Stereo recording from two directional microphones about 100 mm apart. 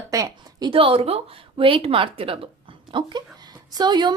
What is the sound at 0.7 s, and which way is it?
Speech, 65° right (ahead or behind).